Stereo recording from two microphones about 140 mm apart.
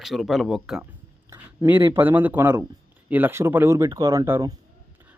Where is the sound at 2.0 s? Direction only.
15° right (ahead or behind).